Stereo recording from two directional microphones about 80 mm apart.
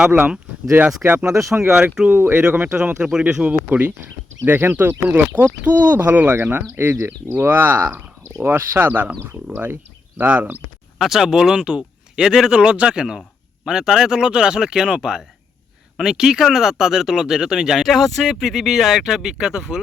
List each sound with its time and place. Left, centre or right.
0.0 s speech: centre
2.1 s speech: right
2.4 s speech: centre
3.5 s speech: right
10.9 s speech: centre